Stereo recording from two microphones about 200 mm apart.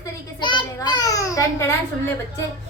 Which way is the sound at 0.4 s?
20° left (ahead or behind).